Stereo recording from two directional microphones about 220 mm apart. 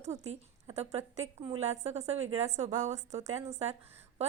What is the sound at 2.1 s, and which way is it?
Speech, 65° right (ahead or behind).